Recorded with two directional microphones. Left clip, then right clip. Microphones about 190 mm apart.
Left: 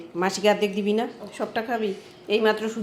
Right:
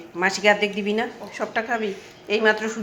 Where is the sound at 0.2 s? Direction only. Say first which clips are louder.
Right 3 dB; 25° left (ahead or behind).